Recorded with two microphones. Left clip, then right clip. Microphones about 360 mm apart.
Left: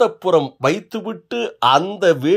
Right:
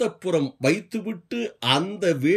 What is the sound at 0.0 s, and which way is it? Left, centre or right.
Speech, centre.